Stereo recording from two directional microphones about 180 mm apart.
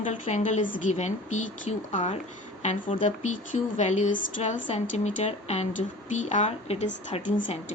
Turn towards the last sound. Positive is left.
turn(degrees=40)  # may be behind; listen again after turning